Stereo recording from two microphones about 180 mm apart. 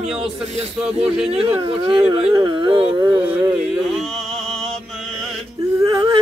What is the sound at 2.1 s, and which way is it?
Speech, 25° right (ahead or behind).